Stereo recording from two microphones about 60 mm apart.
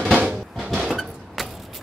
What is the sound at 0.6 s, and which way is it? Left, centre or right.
Vehicle, centre.